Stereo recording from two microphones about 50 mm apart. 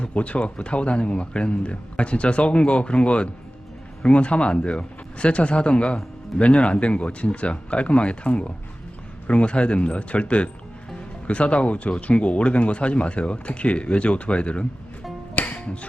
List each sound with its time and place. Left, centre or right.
0.0 s speech: left
15.4 s music: left